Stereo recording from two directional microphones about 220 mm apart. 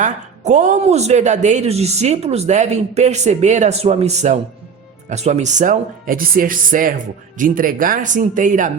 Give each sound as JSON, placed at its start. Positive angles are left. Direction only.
{"t": 0.0, "sound": "speech", "side_deg": -35}